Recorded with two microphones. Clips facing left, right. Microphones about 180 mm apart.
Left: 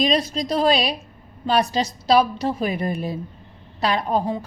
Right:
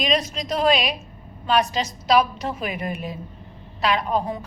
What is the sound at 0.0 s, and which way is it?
A woman's voice, 35° left (ahead or behind).